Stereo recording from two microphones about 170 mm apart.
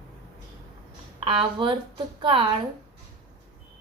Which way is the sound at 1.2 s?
30° right (ahead or behind).